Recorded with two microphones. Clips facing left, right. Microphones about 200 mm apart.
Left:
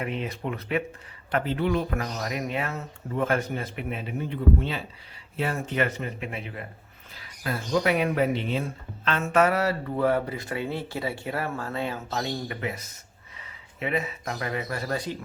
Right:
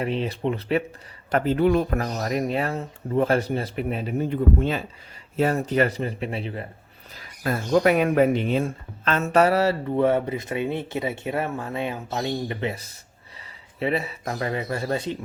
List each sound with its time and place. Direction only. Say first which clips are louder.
0.0 s speech: right 5 dB; 30° right (ahead or behind)
1.3 s speech: right 6 dB; 45° right (ahead or behind)
7.1 s speech: right 5 dB; 45° right (ahead or behind); by 15.2 s 25° right (ahead or behind)